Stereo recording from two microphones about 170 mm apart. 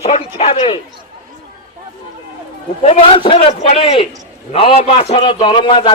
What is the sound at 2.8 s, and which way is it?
Speech, 35° left (ahead or behind).